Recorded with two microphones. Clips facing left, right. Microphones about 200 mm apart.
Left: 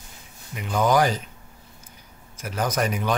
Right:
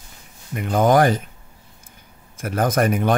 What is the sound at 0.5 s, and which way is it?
Speech, 50° right (ahead or behind).